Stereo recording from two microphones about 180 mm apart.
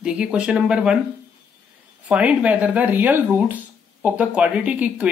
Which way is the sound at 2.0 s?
5° right (ahead or behind).